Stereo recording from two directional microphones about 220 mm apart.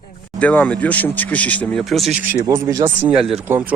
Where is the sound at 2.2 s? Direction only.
15° right (ahead or behind).